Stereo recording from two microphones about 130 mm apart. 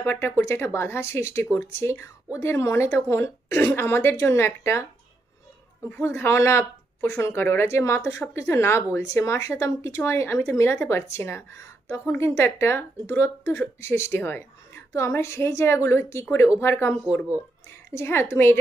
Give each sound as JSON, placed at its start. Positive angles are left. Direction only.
{"t": 0.0, "sound": "speech", "side_deg": 15}
{"t": 5.9, "sound": "speech", "side_deg": 15}